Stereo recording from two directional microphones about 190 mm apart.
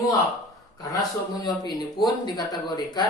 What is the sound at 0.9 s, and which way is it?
Speech, 20° left (ahead or behind).